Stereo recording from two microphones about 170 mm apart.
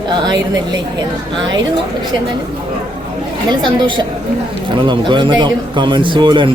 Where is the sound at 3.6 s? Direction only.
30° right (ahead or behind).